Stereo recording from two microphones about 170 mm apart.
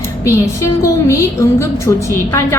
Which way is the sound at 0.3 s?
15° left (ahead or behind).